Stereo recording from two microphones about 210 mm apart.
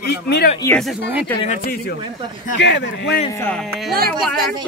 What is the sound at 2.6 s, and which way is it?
Speech, 55° left (ahead or behind).